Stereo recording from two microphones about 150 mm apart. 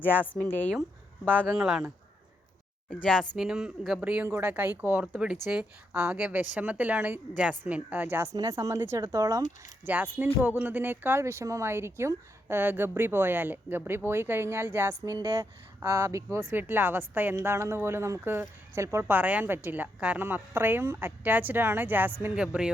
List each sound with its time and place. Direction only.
0.1 s speech: 10° left (ahead or behind)
1.5 s speech: 5° right (ahead or behind)
2.9 s speech: 5° left (ahead or behind); by 9.4 s 25° right (ahead or behind)
9.8 s speech: 10° right (ahead or behind)